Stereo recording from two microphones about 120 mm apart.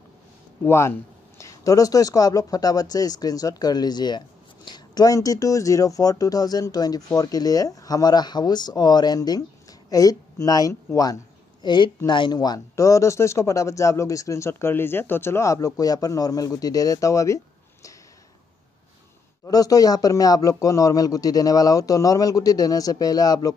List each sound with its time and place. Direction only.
0.7 s speech: 20° left (ahead or behind)
11.6 s speech: 40° left (ahead or behind)
19.4 s speech: 30° left (ahead or behind)